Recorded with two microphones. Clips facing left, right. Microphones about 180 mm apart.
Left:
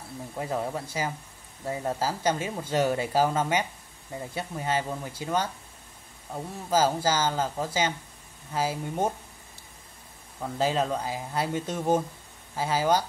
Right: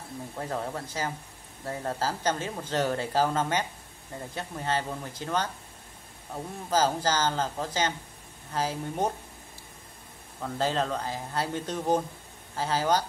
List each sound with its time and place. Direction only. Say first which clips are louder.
0.4 s speech: left 3 dB; 10° left (ahead or behind)
10.4 s speech: left 2 dB; 10° left (ahead or behind)